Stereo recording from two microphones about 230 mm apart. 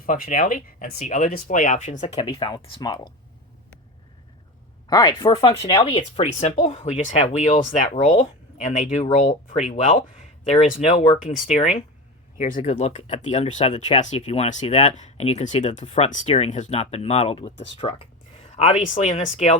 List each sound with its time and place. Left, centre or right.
0.0 s speech: left
4.9 s speech: centre